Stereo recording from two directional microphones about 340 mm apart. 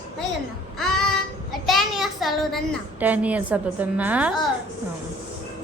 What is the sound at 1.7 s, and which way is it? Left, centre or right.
A child's voice, centre.